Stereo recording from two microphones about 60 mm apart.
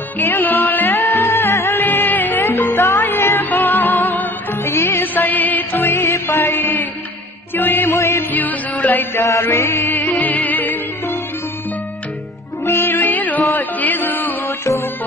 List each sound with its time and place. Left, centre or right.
0.2 s music: left
0.9 s music: left
1.8 s music: left
2.5 s music: left
3.1 s music: left
7.5 s chant: left
7.9 s music: left
8.2 s music: left
8.8 s chant: left
9.5 s music: left
12.6 s music: left
13.6 s chant: left
14.4 s music: left